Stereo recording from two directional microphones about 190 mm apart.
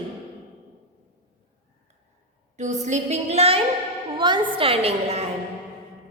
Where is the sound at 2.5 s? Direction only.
40° right (ahead or behind).